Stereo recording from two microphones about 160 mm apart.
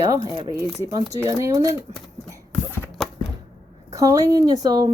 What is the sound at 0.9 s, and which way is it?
Speech, 20° right (ahead or behind).